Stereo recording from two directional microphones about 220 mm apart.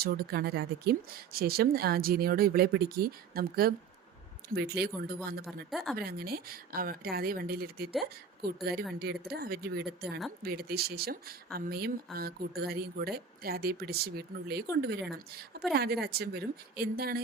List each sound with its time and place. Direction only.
0.0 s speech: 45° right (ahead or behind)
5.7 s speech: centre (ahead or behind)
6.0 s speech: 45° right (ahead or behind)
9.0 s speech: 45° right (ahead or behind)